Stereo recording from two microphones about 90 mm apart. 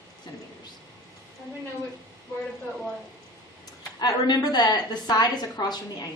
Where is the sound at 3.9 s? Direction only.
50° left (ahead or behind).